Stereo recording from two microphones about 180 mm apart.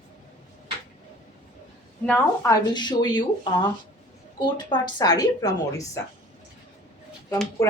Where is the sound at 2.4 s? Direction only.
25° left (ahead or behind).